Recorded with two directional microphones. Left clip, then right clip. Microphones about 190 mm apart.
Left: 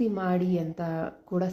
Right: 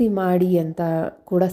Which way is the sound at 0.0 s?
35° right (ahead or behind).